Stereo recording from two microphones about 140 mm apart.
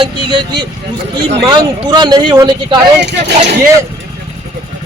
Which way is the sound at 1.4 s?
30° right (ahead or behind).